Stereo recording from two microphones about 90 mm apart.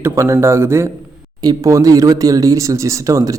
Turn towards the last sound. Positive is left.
turn(degrees=-40)  # may be behind; listen again after turning